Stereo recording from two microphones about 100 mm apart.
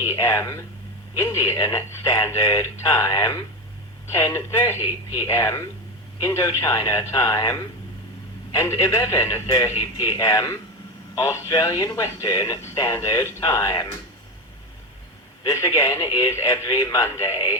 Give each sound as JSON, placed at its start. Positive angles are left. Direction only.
{"t": 0.0, "sound": "a man's voice", "side_deg": 30}
{"t": 8.5, "sound": "a man's voice", "side_deg": 30}
{"t": 15.4, "sound": "a man's voice", "side_deg": 30}